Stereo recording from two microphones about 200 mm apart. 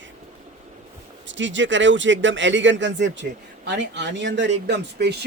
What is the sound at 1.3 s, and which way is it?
A man's voice, 65° right (ahead or behind).